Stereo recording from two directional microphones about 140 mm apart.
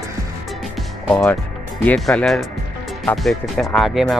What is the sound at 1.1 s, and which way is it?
Speech, 5° left (ahead or behind).